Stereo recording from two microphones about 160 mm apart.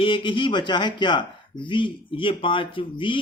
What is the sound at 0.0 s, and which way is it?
Speech, 30° left (ahead or behind).